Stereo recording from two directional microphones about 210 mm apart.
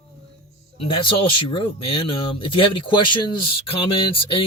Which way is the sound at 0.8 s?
25° left (ahead or behind).